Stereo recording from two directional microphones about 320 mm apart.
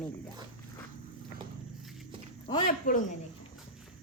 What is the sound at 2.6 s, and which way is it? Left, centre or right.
Speech, left.